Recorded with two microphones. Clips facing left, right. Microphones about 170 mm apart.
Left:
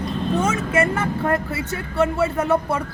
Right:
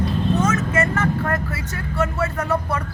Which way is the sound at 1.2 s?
25° left (ahead or behind).